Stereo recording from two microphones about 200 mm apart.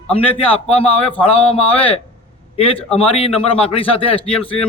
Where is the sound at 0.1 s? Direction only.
30° left (ahead or behind).